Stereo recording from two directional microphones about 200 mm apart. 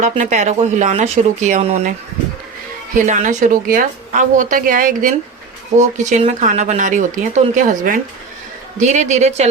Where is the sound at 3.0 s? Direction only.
40° right (ahead or behind).